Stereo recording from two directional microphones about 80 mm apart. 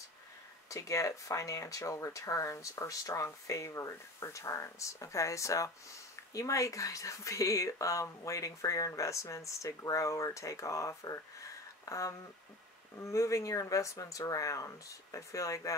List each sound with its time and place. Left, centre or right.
0.7 s speech: left